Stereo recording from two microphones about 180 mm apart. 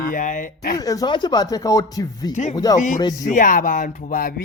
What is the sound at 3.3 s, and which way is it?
Speech, 50° left (ahead or behind).